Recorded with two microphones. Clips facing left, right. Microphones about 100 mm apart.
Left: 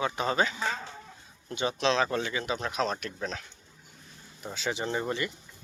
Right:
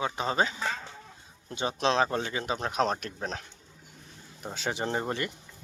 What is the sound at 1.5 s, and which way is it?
Speech, 40° right (ahead or behind).